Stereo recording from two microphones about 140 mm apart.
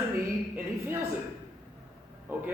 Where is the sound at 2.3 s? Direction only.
15° right (ahead or behind).